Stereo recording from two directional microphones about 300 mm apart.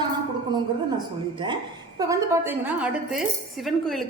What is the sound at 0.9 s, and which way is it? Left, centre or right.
A woman's voice, centre.